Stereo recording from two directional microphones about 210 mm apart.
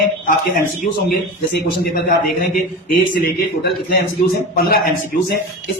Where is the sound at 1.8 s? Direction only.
45° left (ahead or behind).